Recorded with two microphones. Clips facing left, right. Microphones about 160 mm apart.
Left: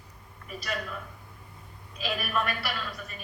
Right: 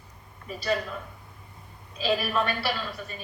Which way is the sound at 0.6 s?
30° right (ahead or behind).